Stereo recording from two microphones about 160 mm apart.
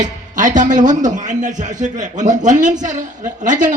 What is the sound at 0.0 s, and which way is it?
A man's voice, 50° right (ahead or behind).